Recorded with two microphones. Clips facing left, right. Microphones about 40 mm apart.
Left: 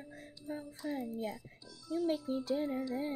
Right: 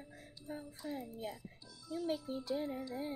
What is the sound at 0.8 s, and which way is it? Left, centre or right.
Speech, left.